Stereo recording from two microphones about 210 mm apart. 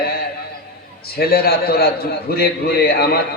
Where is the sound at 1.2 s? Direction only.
45° left (ahead or behind).